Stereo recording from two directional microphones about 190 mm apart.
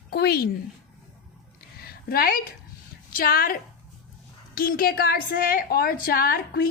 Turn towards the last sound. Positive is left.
turn(degrees=50)  # may be behind; listen again after turning